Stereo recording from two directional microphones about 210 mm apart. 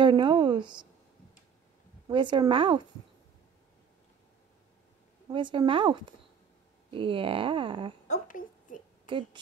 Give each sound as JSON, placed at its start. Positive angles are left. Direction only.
{"t": 0.0, "sound": "speech", "side_deg": -20}
{"t": 2.0, "sound": "speech", "side_deg": -20}
{"t": 5.3, "sound": "speech", "side_deg": -20}
{"t": 8.1, "sound": "a sound", "side_deg": 40}
{"t": 9.0, "sound": "a woman's voice", "side_deg": -20}